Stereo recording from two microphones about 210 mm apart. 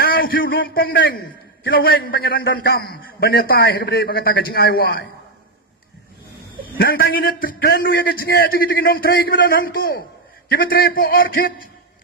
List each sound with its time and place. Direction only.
0.0 s a sound: 45° left (ahead or behind)
0.5 s a man's voice: 45° left (ahead or behind)
6.7 s a man's voice: 45° left (ahead or behind)